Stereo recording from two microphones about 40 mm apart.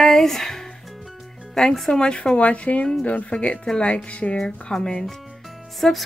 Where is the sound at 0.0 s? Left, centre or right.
Centre.